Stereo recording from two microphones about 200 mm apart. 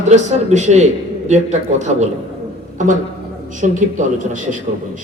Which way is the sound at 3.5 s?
40° right (ahead or behind).